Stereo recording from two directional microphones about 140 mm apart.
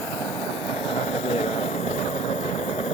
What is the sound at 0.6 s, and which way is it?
Vehicle, 40° left (ahead or behind).